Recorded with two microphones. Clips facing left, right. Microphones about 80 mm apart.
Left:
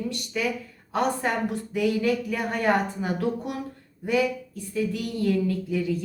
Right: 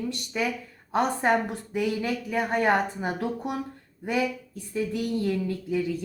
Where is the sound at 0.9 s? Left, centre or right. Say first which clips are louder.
Right 2 dB; right.